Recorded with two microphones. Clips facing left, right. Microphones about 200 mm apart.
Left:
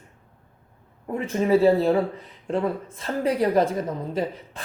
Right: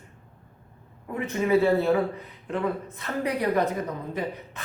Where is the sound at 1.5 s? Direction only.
30° left (ahead or behind).